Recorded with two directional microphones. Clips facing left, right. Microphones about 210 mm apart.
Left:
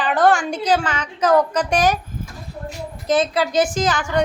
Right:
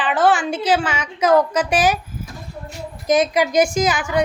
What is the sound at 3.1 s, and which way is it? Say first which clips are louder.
A woman's voice: right 2 dB; 15° right (ahead or behind).